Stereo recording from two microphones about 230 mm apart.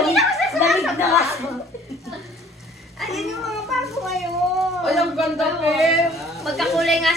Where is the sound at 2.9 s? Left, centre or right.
Centre.